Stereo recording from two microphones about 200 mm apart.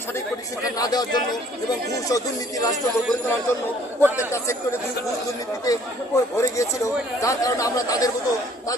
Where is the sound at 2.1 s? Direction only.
20° left (ahead or behind).